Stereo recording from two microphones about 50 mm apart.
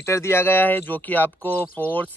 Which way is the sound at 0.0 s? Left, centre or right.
Left.